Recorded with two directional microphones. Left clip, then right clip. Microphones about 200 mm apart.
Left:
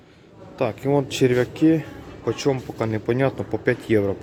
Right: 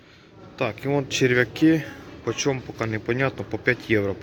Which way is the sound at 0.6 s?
10° left (ahead or behind).